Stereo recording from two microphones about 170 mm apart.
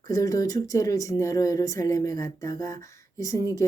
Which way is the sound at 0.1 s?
20° left (ahead or behind).